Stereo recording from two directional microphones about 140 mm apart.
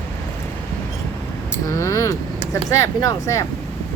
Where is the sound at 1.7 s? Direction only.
20° left (ahead or behind).